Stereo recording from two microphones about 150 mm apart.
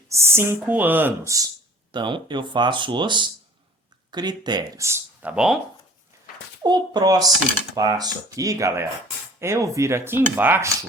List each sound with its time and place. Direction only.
0.1 s speech: 15° right (ahead or behind)
1.9 s speech: 30° right (ahead or behind); by 5.5 s 5° right (ahead or behind)
6.6 s speech: 30° right (ahead or behind); by 10.7 s 15° right (ahead or behind)